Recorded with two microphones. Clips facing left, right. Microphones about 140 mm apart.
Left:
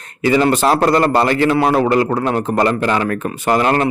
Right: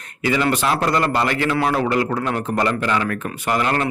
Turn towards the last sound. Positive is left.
turn(degrees=35)  # may be behind; listen again after turning